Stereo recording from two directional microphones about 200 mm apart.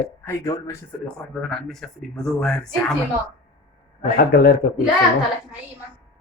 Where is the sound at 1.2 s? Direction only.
Centre (ahead or behind).